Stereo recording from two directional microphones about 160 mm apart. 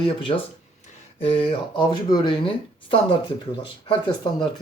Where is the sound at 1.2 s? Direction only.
35° left (ahead or behind).